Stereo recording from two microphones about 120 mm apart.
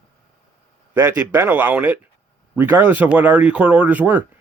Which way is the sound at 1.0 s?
15° right (ahead or behind).